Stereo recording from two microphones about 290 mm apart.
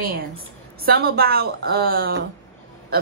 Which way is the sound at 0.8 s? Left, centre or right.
Right.